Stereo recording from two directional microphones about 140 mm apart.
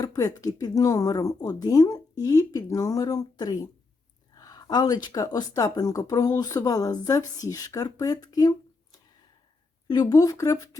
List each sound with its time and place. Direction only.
0.0 s speech: 25° left (ahead or behind)
9.9 s speech: 25° left (ahead or behind)